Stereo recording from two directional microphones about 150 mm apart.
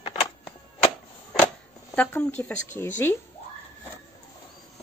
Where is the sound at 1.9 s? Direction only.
15° left (ahead or behind).